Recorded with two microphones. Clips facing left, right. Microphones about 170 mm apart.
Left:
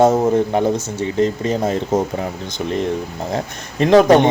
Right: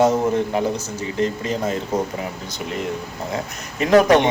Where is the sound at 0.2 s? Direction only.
35° left (ahead or behind).